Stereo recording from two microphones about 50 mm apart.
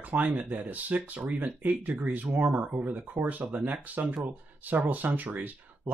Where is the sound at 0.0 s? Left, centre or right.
Right.